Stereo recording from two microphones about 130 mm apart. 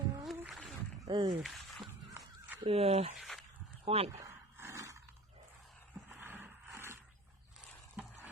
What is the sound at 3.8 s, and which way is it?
Speech, 50° right (ahead or behind).